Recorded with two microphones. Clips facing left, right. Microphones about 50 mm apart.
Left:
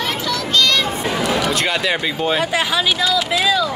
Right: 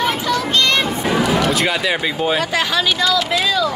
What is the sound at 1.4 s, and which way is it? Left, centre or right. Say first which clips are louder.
Speech: right 1 dB; centre.